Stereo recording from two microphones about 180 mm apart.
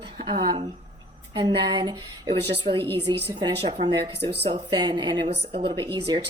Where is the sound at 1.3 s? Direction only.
25° right (ahead or behind).